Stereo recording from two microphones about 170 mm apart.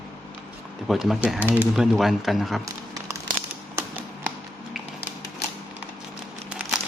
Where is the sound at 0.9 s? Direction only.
Centre (ahead or behind).